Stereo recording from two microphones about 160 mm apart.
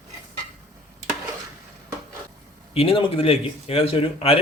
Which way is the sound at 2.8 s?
35° left (ahead or behind).